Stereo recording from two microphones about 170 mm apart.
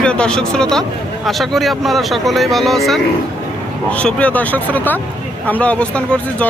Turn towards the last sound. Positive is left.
turn(degrees=5)  # may be behind; listen again after turning